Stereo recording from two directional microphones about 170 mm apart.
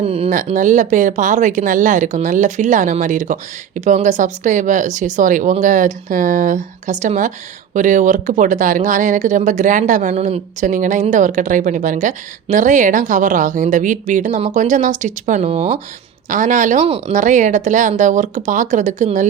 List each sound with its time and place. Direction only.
0.0 s speech: 35° right (ahead or behind)
0.3 s speech: 50° right (ahead or behind)
16.3 s speech: 50° right (ahead or behind)